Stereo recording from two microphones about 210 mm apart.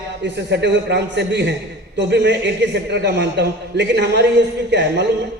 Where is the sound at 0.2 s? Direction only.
55° right (ahead or behind).